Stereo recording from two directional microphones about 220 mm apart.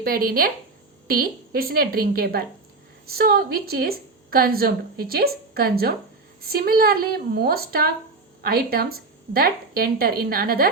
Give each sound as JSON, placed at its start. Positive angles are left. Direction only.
{"t": 0.0, "sound": "a woman's voice", "side_deg": -40}